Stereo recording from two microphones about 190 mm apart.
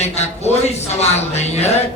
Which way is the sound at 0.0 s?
35° left (ahead or behind).